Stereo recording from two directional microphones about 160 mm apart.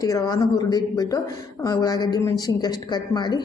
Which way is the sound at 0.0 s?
20° left (ahead or behind).